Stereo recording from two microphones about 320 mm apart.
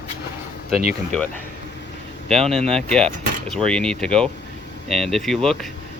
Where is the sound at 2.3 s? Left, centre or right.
Centre.